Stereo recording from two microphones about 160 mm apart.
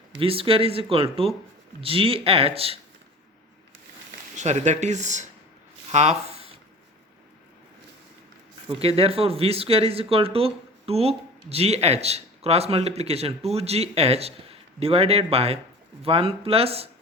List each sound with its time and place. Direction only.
0.2 s speech: 35° right (ahead or behind)
4.4 s speech: 45° right (ahead or behind)
8.8 s speech: 35° right (ahead or behind)